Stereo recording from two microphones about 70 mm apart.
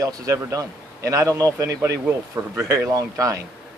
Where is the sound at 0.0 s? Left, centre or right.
Right.